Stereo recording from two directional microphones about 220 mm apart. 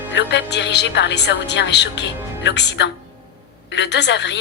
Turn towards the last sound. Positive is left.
turn(degrees=50)  # may be behind; listen again after turning